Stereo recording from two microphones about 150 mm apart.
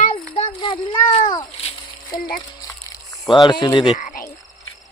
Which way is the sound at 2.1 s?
70° left (ahead or behind).